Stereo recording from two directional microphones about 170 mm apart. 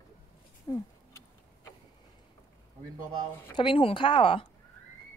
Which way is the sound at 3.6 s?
30° left (ahead or behind).